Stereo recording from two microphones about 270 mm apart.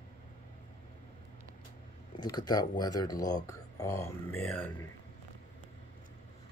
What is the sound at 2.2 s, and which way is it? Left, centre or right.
Speech, centre.